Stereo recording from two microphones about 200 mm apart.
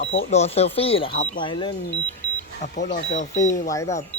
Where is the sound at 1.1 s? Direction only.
40° left (ahead or behind).